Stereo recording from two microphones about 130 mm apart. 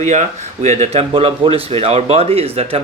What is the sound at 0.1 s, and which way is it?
Speech, 65° right (ahead or behind).